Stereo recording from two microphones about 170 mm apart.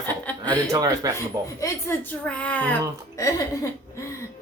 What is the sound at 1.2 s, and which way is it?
Speech, 15° left (ahead or behind).